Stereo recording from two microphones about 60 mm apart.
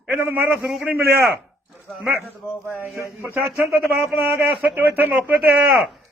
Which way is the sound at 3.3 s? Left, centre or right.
Right.